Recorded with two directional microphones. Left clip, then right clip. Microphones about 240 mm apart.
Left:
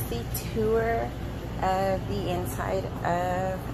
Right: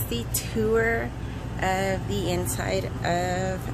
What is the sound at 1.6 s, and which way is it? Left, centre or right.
Speech, right.